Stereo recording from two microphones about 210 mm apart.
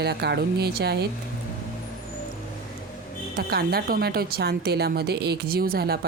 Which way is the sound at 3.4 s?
50° right (ahead or behind).